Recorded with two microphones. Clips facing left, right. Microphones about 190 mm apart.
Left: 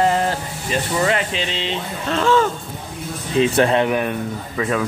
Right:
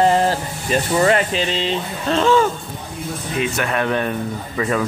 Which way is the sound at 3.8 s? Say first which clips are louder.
Even; 10° left (ahead or behind).